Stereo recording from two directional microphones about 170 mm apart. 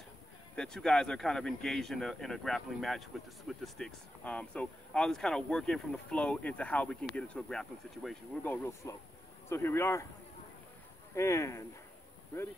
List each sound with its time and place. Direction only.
0.6 s speech: 5° left (ahead or behind)
8.8 s speech: 20° left (ahead or behind)
11.1 s speech: 15° left (ahead or behind)